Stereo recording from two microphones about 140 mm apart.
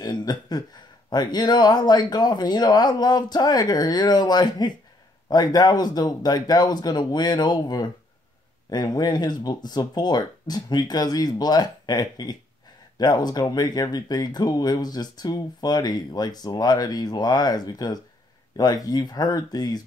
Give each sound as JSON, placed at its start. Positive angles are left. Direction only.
{"t": 0.0, "sound": "speech", "side_deg": 30}